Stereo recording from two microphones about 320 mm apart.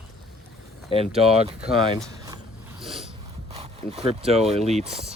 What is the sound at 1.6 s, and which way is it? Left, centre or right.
Speech, centre.